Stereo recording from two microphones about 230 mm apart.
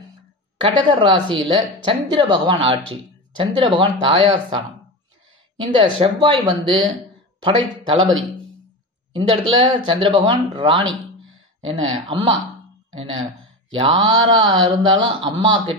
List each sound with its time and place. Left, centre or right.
0.6 s speech: right
5.6 s speech: right
9.6 s speech: right
13.7 s speech: right